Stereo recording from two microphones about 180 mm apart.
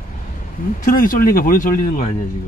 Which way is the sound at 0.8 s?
50° left (ahead or behind).